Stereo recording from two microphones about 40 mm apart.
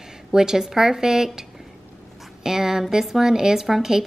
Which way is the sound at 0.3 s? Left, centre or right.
Centre.